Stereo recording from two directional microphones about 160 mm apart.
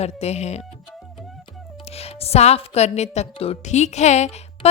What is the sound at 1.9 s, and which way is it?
Speech, 40° left (ahead or behind).